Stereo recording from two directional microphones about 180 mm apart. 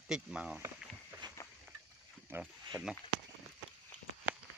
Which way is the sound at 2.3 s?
10° right (ahead or behind).